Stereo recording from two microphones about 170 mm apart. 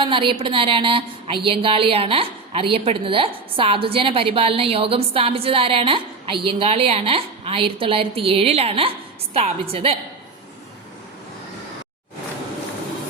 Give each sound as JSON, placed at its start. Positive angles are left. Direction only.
{"t": 0.0, "sound": "a woman's voice", "side_deg": -30}